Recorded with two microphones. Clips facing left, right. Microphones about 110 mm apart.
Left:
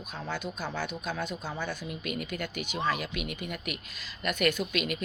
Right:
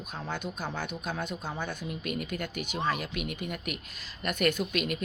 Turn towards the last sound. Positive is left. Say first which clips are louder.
# right 1 dB
turn(degrees=-45)  # may be behind; listen again after turning